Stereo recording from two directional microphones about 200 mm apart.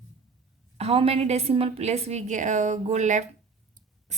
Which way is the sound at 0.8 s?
30° right (ahead or behind).